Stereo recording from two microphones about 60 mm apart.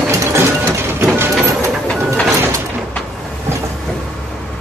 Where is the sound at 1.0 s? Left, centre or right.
Right.